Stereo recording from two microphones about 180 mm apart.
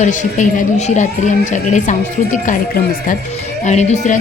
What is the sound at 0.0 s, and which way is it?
Speech, 45° left (ahead or behind).